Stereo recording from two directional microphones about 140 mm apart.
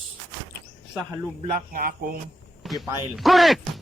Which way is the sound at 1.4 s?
65° right (ahead or behind).